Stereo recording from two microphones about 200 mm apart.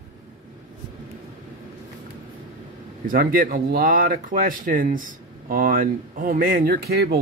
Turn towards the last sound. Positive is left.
turn(degrees=-50)  # may be behind; listen again after turning